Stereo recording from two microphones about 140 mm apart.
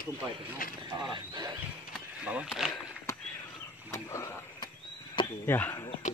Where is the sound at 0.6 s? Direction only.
90° left.